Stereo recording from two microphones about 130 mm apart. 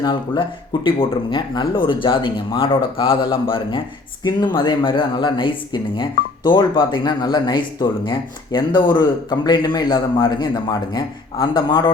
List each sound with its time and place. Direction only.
0.0 s speech: 35° left (ahead or behind)